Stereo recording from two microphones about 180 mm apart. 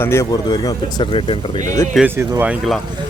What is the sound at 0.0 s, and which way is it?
Speech, 15° left (ahead or behind).